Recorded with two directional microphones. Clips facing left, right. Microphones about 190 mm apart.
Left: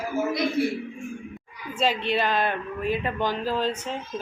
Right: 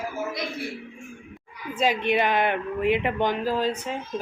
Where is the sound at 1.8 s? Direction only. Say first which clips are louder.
Right 2 dB; 15° right (ahead or behind).